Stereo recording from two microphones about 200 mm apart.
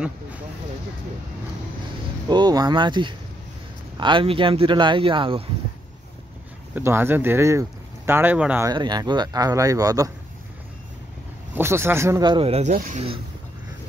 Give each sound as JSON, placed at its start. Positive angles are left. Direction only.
{"t": 2.2, "sound": "a man's voice", "side_deg": -20}
{"t": 6.7, "sound": "speech", "side_deg": -10}
{"t": 8.7, "sound": "a man's voice", "side_deg": -20}
{"t": 11.5, "sound": "speech", "side_deg": -10}
{"t": 12.7, "sound": "speech", "side_deg": -45}